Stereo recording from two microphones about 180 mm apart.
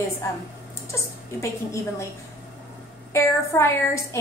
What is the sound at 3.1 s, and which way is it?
Speech, 15° left (ahead or behind).